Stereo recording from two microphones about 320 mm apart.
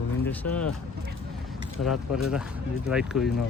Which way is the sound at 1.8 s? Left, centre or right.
Left.